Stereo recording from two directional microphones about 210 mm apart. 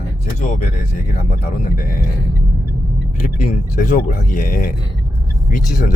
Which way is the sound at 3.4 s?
45° left (ahead or behind).